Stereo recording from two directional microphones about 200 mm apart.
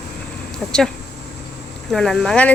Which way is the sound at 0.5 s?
5° left (ahead or behind).